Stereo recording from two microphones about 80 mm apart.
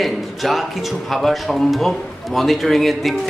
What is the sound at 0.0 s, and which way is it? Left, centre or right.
Speech, centre.